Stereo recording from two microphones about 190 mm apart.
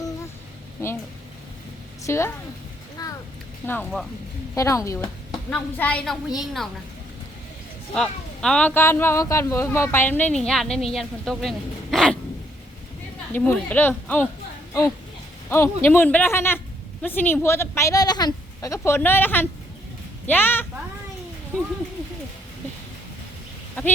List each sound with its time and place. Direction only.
0.8 s speech: 15° left (ahead or behind)
2.0 s speech: 15° left (ahead or behind)
3.0 s a sound: 20° left (ahead or behind)
3.7 s a woman's voice: 10° left (ahead or behind)
7.9 s a woman's voice: 5° left (ahead or behind)
13.3 s speech: 10° left (ahead or behind)
15.4 s speech: 10° left (ahead or behind)
23.8 s speech: 10° left (ahead or behind)